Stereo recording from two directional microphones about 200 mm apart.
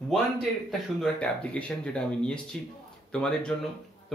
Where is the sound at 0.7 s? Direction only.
5° left (ahead or behind).